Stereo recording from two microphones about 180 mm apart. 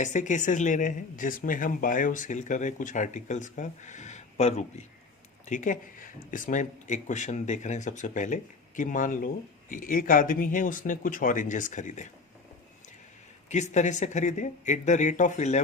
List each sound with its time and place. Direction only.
0.0 s speech: 45° left (ahead or behind)
13.5 s speech: 40° left (ahead or behind)